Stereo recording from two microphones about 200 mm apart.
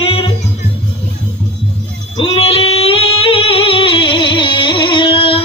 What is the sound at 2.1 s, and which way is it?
Singing, 25° left (ahead or behind).